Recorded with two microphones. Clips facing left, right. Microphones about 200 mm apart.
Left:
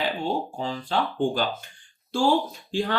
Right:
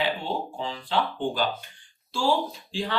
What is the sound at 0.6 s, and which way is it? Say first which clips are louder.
Speech: left 1 dB; 45° left (ahead or behind).